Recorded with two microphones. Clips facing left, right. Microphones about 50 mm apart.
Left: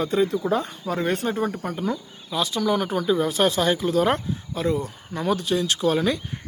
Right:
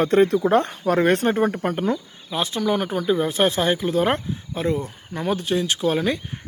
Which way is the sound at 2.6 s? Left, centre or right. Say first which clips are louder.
Right 1 dB; centre.